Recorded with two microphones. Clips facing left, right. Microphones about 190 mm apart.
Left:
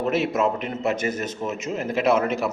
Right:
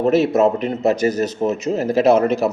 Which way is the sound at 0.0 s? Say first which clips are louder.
Right 7 dB; 40° right (ahead or behind).